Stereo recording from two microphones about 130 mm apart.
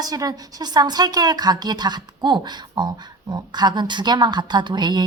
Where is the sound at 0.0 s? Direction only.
30° right (ahead or behind).